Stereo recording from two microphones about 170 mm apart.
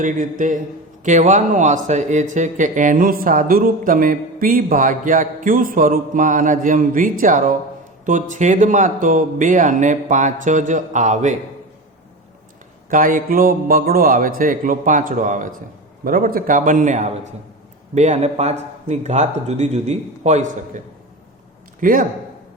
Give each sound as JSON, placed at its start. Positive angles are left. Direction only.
{"t": 0.0, "sound": "speech", "side_deg": -50}
{"t": 12.9, "sound": "speech", "side_deg": -55}